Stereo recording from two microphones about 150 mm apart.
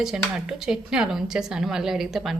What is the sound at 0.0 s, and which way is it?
A woman's voice, 5° right (ahead or behind).